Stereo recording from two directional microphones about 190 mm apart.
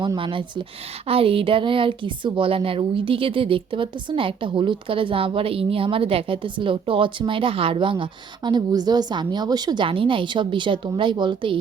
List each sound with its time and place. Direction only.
0.0 s speech: 25° right (ahead or behind)